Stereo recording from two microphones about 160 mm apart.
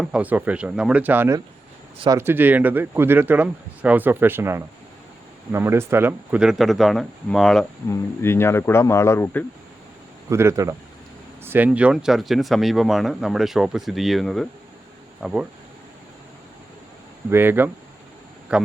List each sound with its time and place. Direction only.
0.0 s speech: 5° right (ahead or behind)
7.9 s speech: 15° left (ahead or behind)
10.2 s speech: 15° right (ahead or behind)
17.3 s speech: 15° right (ahead or behind)